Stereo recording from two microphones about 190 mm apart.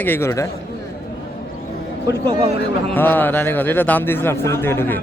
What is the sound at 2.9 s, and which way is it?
A man's voice, 10° left (ahead or behind).